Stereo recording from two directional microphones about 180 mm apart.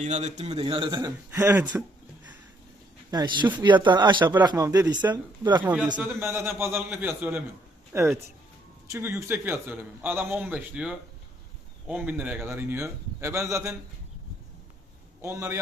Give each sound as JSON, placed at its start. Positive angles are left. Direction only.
{"t": 0.0, "sound": "a man's voice", "side_deg": -40}
{"t": 1.4, "sound": "a man's voice", "side_deg": -10}
{"t": 3.1, "sound": "speech", "side_deg": -25}
{"t": 5.6, "sound": "a man's voice", "side_deg": -10}
{"t": 15.2, "sound": "a man's voice", "side_deg": -15}